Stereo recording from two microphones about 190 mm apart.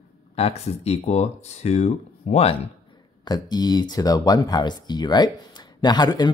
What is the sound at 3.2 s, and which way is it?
Speech, 20° left (ahead or behind).